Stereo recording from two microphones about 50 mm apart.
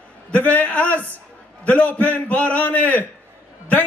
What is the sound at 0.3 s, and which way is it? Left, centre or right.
A man's voice, left.